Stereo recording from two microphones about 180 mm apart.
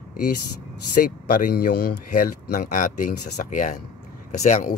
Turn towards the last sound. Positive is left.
turn(degrees=40)  # may be behind; listen again after turning